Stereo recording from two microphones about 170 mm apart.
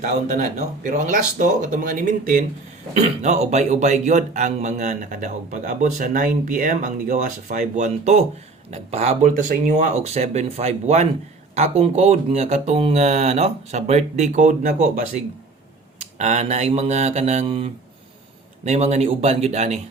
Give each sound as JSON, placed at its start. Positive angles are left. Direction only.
{"t": 0.0, "sound": "a man's voice", "side_deg": -45}
{"t": 2.9, "sound": "a man's voice", "side_deg": -40}